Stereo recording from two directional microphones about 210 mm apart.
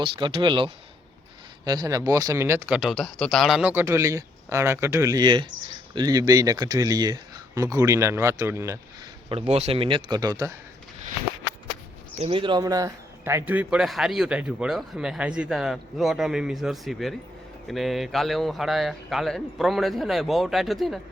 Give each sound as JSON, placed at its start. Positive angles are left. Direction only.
{"t": 0.0, "sound": "speech", "side_deg": -25}
{"t": 9.3, "sound": "speech", "side_deg": -30}
{"t": 12.2, "sound": "a man's voice", "side_deg": -25}